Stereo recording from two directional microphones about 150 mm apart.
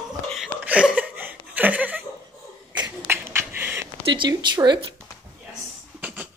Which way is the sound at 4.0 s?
30° right (ahead or behind).